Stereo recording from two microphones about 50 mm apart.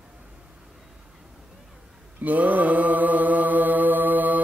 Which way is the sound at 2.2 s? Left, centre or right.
Right.